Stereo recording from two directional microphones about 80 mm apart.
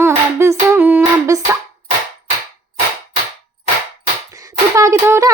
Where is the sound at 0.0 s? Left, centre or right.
Right.